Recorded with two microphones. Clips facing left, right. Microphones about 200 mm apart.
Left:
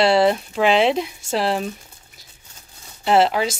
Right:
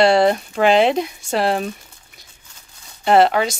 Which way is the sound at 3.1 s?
5° left (ahead or behind).